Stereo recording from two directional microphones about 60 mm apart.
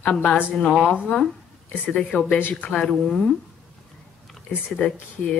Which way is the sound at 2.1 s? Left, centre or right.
Centre.